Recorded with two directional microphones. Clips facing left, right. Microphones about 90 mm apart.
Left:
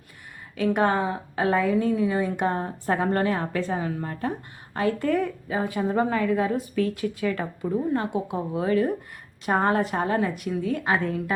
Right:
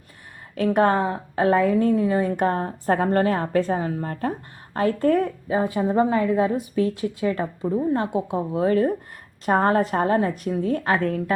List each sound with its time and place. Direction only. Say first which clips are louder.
0.5 s a woman's voice: right 3 dB; 45° right (ahead or behind)